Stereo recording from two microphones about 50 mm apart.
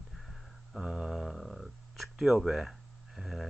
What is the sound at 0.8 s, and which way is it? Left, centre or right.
Speech, centre.